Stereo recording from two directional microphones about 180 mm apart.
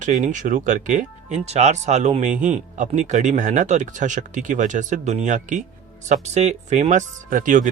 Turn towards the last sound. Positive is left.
turn(degrees=-45)  # may be behind; listen again after turning